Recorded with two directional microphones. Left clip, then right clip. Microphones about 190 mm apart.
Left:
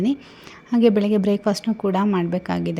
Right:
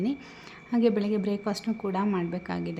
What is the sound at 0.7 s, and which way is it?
A woman's voice, 30° left (ahead or behind).